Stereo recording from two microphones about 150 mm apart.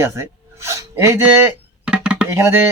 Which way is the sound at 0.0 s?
20° right (ahead or behind).